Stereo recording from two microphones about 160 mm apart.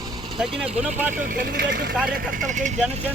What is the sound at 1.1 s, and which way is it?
Speech, 60° right (ahead or behind).